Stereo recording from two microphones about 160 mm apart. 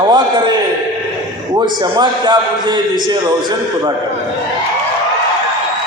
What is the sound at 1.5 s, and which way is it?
A man's voice, 30° right (ahead or behind).